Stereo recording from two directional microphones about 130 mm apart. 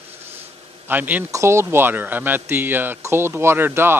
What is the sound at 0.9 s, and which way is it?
Speech, 15° right (ahead or behind).